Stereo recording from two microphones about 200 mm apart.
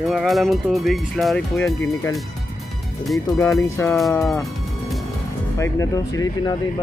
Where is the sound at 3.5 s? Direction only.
15° left (ahead or behind).